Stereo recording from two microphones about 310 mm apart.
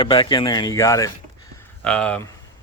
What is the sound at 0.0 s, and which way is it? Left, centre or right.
Speech, centre.